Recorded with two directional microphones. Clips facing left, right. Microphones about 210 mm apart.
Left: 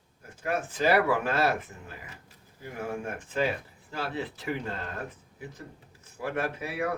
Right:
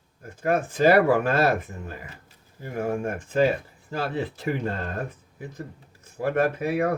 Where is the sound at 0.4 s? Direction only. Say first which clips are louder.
Right 7 dB; 50° right (ahead or behind).